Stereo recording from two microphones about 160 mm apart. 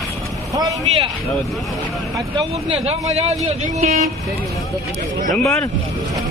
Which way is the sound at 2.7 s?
40° right (ahead or behind).